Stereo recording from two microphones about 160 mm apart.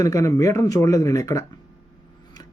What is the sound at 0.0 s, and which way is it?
A man's voice, 20° left (ahead or behind).